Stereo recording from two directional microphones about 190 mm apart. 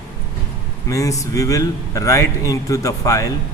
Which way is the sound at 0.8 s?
15° left (ahead or behind).